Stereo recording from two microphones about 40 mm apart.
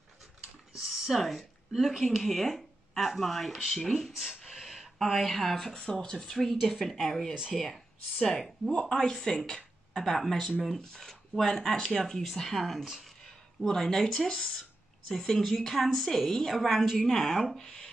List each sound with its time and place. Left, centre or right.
0.7 s speech: centre
4.5 s a sound: centre
5.0 s speech: centre
8.7 s speech: centre
13.7 s speech: centre
17.6 s a sound: centre